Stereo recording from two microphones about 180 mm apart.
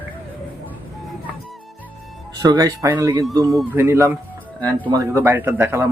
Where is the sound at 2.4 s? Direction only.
20° right (ahead or behind).